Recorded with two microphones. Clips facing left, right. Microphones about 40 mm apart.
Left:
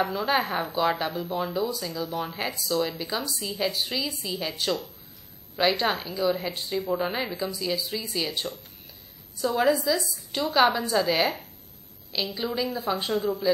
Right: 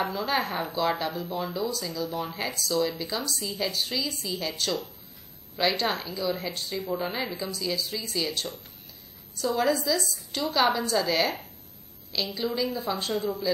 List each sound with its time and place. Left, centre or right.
0.0 s a woman's voice: centre
12.4 s a woman's voice: centre